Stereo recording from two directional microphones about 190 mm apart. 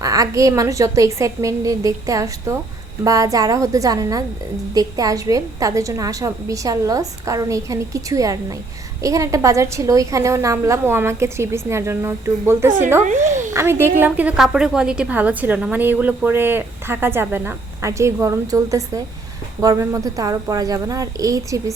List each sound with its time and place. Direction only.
0.0 s a woman's voice: 20° right (ahead or behind)